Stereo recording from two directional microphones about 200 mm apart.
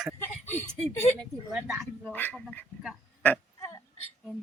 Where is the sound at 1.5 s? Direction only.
5° right (ahead or behind).